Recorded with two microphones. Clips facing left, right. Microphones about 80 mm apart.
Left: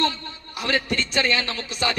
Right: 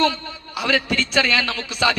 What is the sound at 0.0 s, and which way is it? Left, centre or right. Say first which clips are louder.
A man's voice: right 4 dB; right.